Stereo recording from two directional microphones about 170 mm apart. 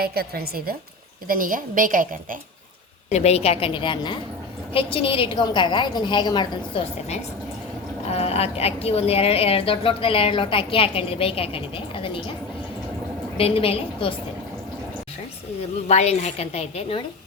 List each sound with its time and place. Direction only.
0.0 s a woman's voice: 65° right (ahead or behind)
3.1 s a woman's voice: 40° left (ahead or behind)
8.1 s a woman's voice: 35° left (ahead or behind)
13.3 s a woman's voice: 35° left (ahead or behind)
15.9 s a woman's voice: 40° left (ahead or behind)